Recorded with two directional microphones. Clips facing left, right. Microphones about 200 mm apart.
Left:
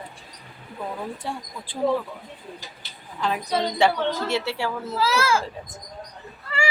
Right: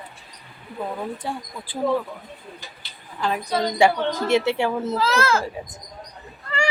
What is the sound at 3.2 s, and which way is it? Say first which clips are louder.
Speech: right 1 dB; centre (ahead or behind).